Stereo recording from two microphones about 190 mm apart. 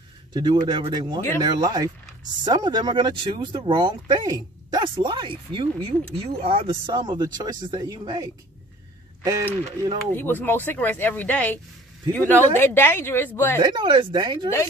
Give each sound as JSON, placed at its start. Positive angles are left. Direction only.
{"t": 0.3, "sound": "speech", "side_deg": -20}
{"t": 10.1, "sound": "speech", "side_deg": 10}
{"t": 13.6, "sound": "speech", "side_deg": -25}